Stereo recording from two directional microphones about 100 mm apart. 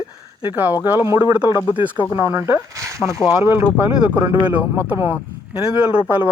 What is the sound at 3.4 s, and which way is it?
Speech, 20° right (ahead or behind).